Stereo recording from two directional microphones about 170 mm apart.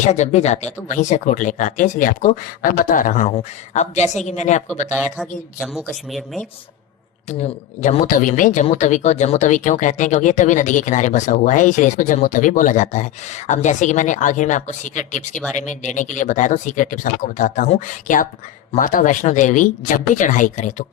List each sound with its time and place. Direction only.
0.0 s speech: 40° left (ahead or behind)
4.9 s speech: centre (ahead or behind)
7.3 s speech: 40° left (ahead or behind)